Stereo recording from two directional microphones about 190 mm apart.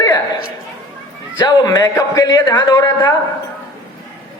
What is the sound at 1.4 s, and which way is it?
A man's voice, 20° left (ahead or behind).